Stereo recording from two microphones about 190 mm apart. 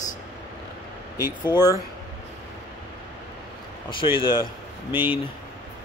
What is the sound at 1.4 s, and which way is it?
Speech, 20° left (ahead or behind).